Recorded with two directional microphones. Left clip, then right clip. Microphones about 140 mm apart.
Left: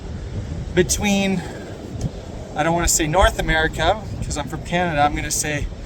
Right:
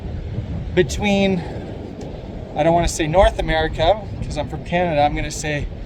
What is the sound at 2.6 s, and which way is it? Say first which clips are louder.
Speech: right 3 dB; 25° left (ahead or behind).